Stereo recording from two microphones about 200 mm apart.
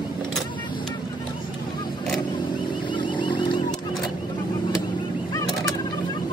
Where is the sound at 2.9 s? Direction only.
25° left (ahead or behind).